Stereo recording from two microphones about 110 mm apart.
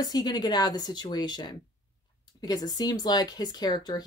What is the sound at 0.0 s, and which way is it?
Speech, 40° left (ahead or behind).